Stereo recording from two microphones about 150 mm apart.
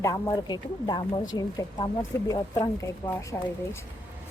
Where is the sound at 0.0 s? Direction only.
25° left (ahead or behind).